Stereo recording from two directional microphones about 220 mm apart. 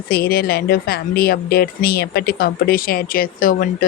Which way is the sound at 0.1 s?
45° left (ahead or behind).